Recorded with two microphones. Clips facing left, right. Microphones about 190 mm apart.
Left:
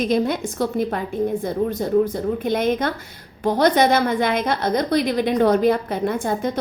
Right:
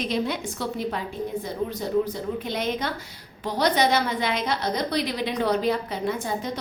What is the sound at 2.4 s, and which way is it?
A woman's voice, 50° left (ahead or behind).